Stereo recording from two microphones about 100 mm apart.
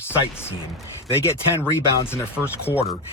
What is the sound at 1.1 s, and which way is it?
Speech, 25° left (ahead or behind).